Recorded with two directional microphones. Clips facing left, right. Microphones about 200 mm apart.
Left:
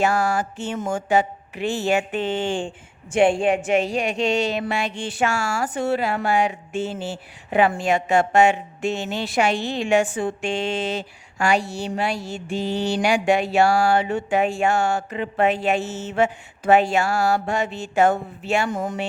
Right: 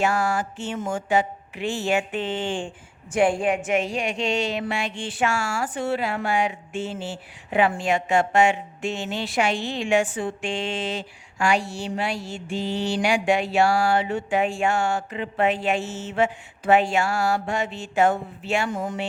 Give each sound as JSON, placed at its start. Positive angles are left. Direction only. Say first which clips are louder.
{"t": 0.0, "sound": "a woman's voice", "louder": "left 2 dB", "side_deg": 40}
{"t": 3.1, "sound": "a woman's voice", "louder": "left 3 dB", "side_deg": 25}